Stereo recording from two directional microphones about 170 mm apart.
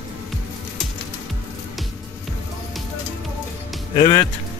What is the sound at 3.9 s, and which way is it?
Speech, 25° left (ahead or behind).